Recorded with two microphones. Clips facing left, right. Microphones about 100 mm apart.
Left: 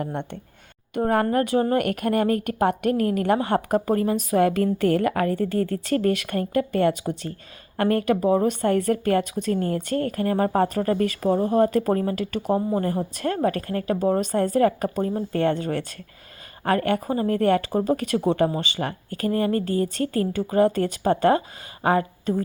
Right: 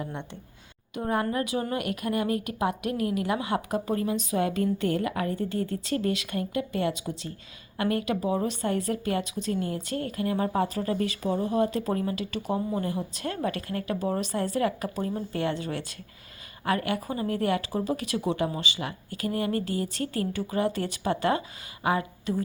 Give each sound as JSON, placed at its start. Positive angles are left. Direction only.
{"t": 0.0, "sound": "a woman's voice", "side_deg": 55}